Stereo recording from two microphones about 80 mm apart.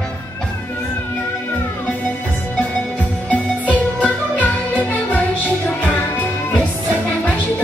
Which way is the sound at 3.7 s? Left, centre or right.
Centre.